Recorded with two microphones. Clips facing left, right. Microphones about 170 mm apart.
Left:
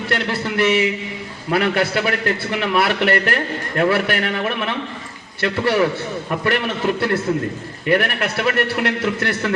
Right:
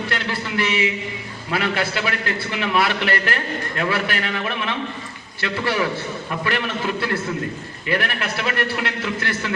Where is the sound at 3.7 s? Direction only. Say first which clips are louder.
Left 7 dB; 55° left (ahead or behind).